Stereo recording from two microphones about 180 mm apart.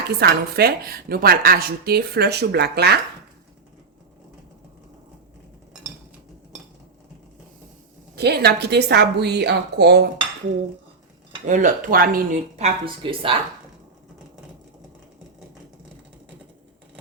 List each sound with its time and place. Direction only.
0.1 s speech: 60° right (ahead or behind)
8.1 s a woman's voice: 65° right (ahead or behind)
11.4 s a woman's voice: 45° right (ahead or behind); by 13.4 s 30° right (ahead or behind)